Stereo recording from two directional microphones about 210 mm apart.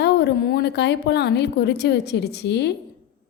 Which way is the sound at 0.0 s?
50° left (ahead or behind).